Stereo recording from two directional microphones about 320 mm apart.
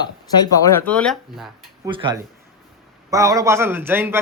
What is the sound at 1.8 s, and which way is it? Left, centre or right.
A woman's voice, centre.